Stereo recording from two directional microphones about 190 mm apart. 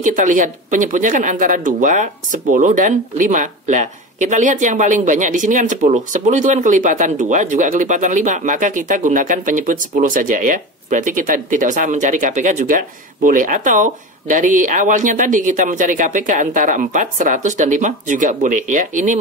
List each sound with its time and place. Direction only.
0.0 s speech: 45° right (ahead or behind)